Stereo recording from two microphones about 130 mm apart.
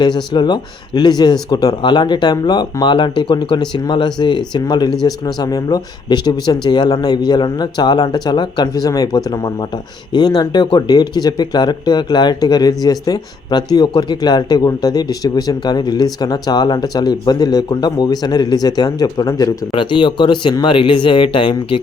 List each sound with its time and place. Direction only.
0.0 s speech: 35° left (ahead or behind)